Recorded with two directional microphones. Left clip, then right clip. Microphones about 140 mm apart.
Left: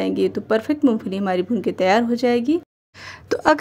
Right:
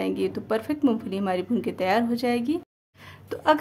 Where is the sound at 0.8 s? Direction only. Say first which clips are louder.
Left 5 dB; 20° left (ahead or behind).